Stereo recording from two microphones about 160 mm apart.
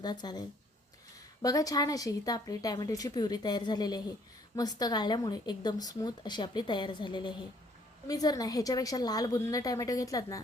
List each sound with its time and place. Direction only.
0.0 s speech: 25° left (ahead or behind)